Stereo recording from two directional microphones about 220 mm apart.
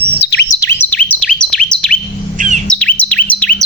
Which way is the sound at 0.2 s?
50° left (ahead or behind).